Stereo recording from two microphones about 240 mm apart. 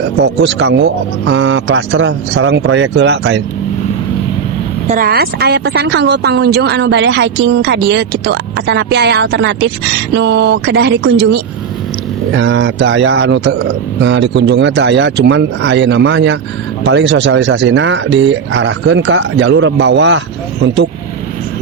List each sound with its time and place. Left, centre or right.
0.4 s speech: right
4.9 s speech: right
12.4 s speech: right